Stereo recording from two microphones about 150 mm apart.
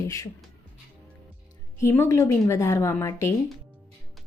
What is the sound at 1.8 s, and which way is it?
A woman's voice, 20° left (ahead or behind).